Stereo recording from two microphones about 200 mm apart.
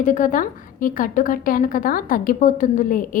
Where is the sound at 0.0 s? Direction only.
40° left (ahead or behind).